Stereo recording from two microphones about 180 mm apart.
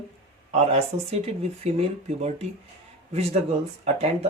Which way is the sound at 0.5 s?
35° right (ahead or behind).